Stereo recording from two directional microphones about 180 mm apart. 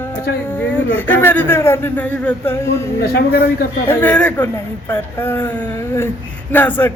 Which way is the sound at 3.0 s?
60° left (ahead or behind).